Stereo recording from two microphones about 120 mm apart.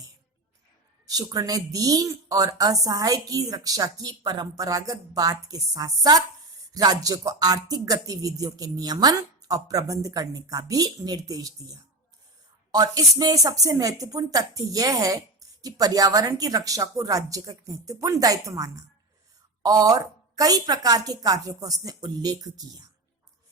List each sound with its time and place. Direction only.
1.0 s a woman's voice: 35° right (ahead or behind)